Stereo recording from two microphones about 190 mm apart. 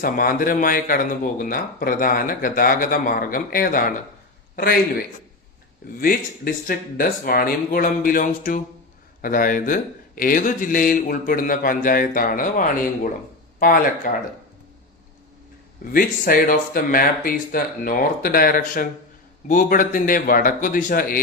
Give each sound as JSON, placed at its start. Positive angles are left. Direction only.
{"t": 0.0, "sound": "a man's voice", "side_deg": 45}
{"t": 6.0, "sound": "speech", "side_deg": 50}
{"t": 15.9, "sound": "speech", "side_deg": 50}